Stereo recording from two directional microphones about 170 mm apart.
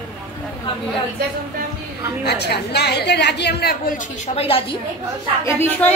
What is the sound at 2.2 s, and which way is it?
A woman's voice, 75° left (ahead or behind).